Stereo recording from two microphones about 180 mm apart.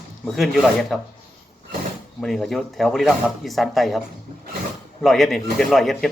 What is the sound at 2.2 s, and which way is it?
A man's voice, centre (ahead or behind).